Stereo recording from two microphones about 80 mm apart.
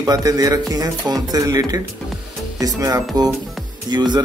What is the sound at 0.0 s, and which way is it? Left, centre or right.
A man's voice, right.